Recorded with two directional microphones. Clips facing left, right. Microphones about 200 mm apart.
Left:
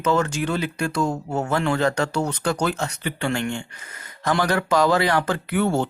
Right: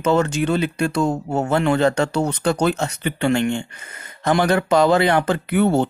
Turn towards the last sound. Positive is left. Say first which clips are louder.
# right 4 dB
turn(degrees=-20)  # may be behind; listen again after turning